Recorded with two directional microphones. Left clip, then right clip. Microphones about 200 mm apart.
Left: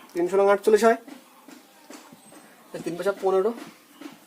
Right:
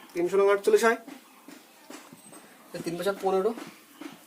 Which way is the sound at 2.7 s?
30° left (ahead or behind).